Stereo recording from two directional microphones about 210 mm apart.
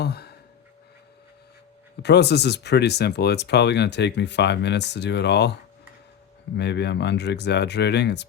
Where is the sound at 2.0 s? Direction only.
55° left (ahead or behind).